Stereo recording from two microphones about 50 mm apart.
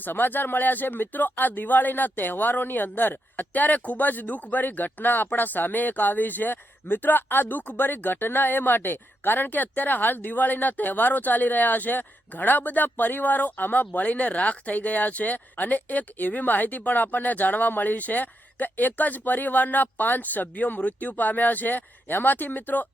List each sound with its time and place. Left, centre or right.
0.0 s speech: left